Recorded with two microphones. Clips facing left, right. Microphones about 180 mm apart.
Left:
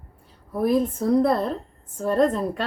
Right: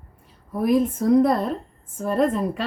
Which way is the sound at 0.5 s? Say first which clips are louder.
Right 1 dB; 5° right (ahead or behind).